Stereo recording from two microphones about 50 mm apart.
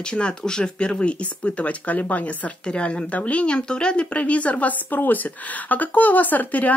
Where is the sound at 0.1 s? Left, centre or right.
Centre.